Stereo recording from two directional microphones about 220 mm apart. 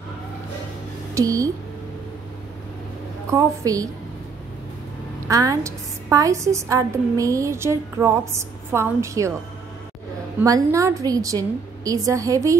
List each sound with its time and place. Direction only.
1.1 s speech: 15° right (ahead or behind)
3.3 s a woman's voice: 15° right (ahead or behind)
5.3 s a woman's voice: 15° right (ahead or behind)
10.4 s a woman's voice: 15° right (ahead or behind)